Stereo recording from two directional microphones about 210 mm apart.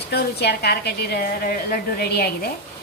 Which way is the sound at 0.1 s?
50° left (ahead or behind).